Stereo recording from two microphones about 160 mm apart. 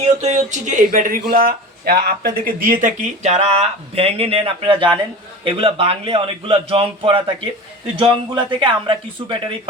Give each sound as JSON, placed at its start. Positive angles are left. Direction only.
{"t": 0.2, "sound": "a man's voice", "side_deg": -45}